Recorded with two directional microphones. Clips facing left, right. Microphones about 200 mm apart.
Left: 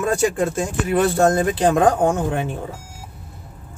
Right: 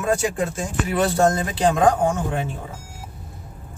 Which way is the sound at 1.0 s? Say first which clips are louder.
Left 3 dB; 55° left (ahead or behind).